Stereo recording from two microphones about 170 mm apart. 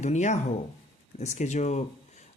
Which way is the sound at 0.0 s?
45° left (ahead or behind).